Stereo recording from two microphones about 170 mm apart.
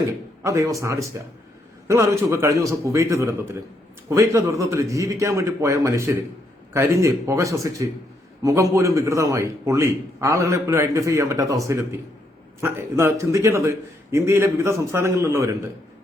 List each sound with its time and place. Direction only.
0.4 s a man's voice: 20° right (ahead or behind)